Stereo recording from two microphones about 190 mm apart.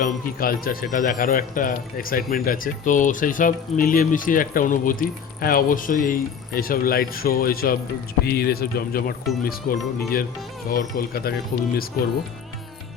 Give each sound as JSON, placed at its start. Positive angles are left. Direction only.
{"t": 0.0, "sound": "speech", "side_deg": 50}